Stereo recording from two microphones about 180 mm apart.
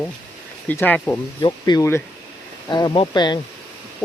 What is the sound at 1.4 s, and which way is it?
Speech, 25° left (ahead or behind).